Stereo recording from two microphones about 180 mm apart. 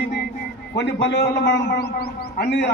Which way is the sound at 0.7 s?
70° left (ahead or behind).